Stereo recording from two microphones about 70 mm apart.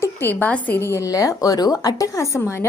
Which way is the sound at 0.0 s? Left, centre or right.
Left.